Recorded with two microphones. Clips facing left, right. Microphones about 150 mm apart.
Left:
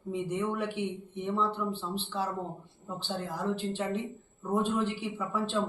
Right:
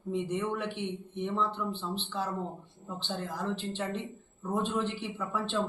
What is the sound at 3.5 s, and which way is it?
Speech, 10° left (ahead or behind).